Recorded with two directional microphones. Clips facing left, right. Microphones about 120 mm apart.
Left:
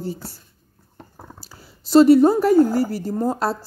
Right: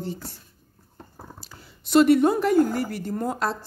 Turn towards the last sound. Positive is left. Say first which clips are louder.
# left 5 dB
turn(degrees=35)  # may be behind; listen again after turning